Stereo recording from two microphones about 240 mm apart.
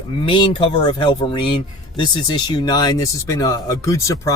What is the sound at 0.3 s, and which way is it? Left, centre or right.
Speech, centre.